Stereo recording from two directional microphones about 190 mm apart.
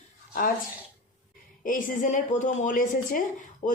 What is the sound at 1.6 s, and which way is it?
A woman's voice, 45° left (ahead or behind).